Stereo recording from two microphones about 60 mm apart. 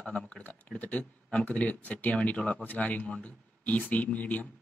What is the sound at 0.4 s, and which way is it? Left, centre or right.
Speech, left.